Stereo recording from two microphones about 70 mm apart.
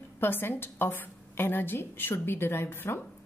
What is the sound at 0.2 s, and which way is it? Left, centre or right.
A woman's voice, left.